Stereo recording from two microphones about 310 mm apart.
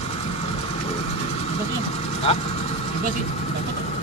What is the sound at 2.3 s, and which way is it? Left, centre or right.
Speech, centre.